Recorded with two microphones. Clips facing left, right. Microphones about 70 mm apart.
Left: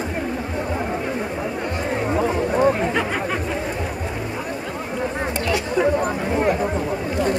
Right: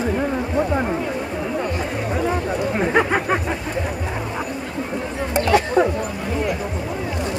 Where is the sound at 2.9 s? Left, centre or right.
Right.